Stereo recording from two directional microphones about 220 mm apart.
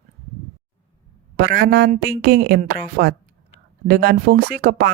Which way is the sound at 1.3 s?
45° right (ahead or behind).